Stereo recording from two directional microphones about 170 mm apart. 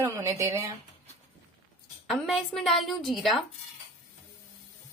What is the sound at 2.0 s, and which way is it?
A woman's voice, centre (ahead or behind).